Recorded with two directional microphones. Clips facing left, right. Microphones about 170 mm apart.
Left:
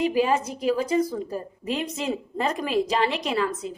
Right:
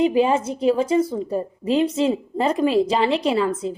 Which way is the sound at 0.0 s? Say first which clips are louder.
Right 4 dB; 25° right (ahead or behind).